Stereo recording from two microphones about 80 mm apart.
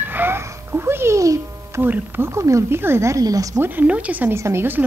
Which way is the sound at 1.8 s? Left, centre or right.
Right.